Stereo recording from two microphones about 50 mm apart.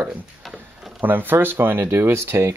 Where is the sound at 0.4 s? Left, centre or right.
Centre.